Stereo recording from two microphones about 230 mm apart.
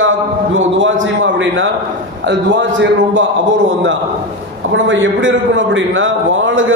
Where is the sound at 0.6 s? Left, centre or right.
Right.